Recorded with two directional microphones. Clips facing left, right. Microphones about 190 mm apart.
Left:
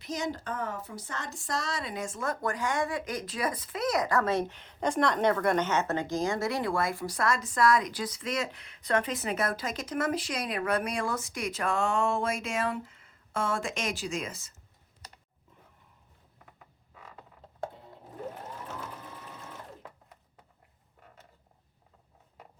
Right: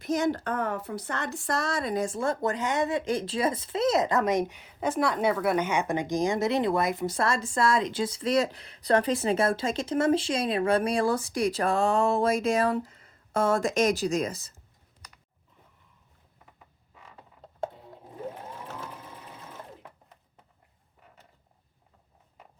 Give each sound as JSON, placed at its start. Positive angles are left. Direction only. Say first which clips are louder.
{"t": 0.0, "sound": "a woman's voice", "louder": "right 7 dB", "side_deg": -55}